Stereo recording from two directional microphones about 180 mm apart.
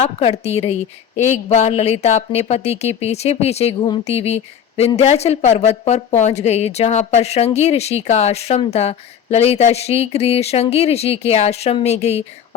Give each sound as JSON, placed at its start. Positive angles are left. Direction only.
{"t": 0.0, "sound": "a woman's voice", "side_deg": 35}